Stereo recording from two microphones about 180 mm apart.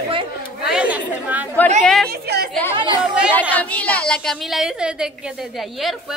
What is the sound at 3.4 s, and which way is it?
A woman's voice, 10° left (ahead or behind).